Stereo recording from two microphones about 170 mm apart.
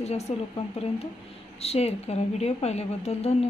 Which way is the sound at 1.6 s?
40° left (ahead or behind).